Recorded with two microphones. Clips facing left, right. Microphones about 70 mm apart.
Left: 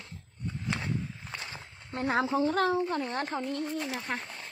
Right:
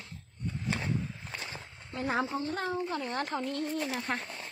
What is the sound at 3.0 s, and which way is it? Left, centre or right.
Speech, left.